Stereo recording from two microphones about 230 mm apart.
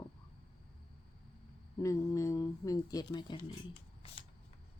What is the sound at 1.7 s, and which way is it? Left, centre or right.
Speech, centre.